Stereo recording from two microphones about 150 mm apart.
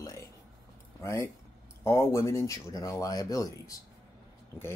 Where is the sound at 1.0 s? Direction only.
20° left (ahead or behind).